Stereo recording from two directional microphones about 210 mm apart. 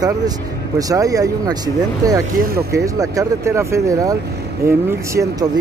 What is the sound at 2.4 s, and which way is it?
Speech, 45° right (ahead or behind).